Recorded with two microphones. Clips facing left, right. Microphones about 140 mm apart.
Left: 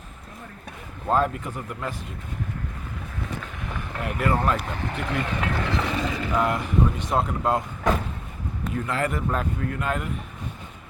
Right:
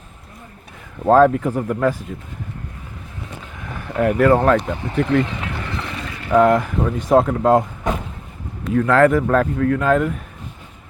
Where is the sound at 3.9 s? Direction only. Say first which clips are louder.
Right 11 dB; 70° right (ahead or behind).